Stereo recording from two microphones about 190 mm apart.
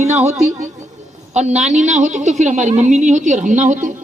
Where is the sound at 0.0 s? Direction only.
35° right (ahead or behind).